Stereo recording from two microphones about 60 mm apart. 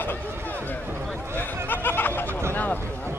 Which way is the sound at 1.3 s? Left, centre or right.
Left.